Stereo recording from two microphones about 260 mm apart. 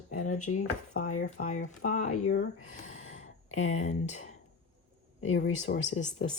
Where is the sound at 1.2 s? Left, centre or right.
Left.